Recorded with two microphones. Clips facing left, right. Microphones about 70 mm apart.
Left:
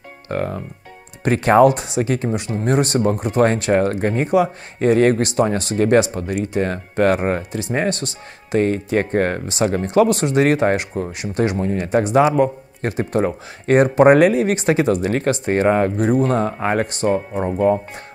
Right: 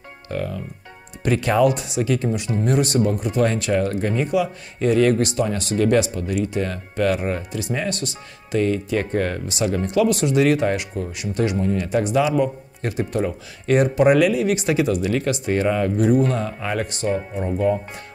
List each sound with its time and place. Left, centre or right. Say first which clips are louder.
0.3 s music: left 4 dB; left
1.2 s speech: left 5 dB; left